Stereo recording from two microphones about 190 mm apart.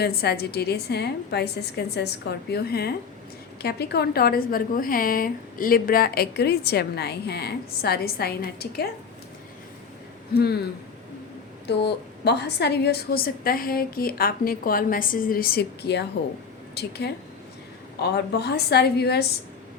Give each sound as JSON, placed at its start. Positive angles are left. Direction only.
{"t": 0.0, "sound": "a woman's voice", "side_deg": 55}
{"t": 10.3, "sound": "a woman's voice", "side_deg": 55}
{"t": 18.0, "sound": "a woman's voice", "side_deg": 60}